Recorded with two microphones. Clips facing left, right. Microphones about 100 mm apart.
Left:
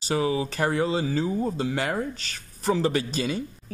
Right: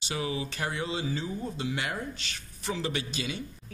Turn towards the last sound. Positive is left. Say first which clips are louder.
# left 7 dB
turn(degrees=40)  # may be behind; listen again after turning